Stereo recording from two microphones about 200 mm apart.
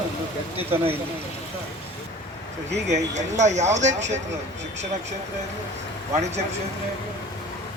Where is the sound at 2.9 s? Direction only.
35° right (ahead or behind).